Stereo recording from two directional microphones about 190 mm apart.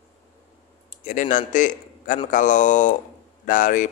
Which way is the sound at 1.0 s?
45° left (ahead or behind).